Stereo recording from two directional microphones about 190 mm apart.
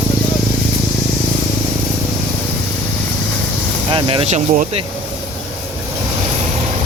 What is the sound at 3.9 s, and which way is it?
Speech, 30° right (ahead or behind).